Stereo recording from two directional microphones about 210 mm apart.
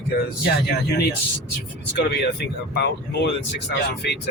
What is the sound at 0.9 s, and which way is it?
Speech, 50° left (ahead or behind).